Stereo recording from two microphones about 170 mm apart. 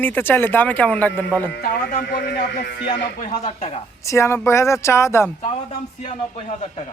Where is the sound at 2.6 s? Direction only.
75° left (ahead or behind).